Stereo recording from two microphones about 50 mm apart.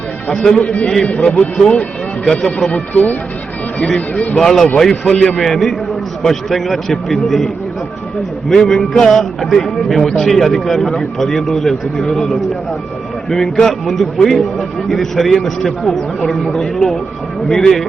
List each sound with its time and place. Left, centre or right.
0.3 s a man's voice: centre
2.7 s a man's voice: left
3.8 s a man's voice: centre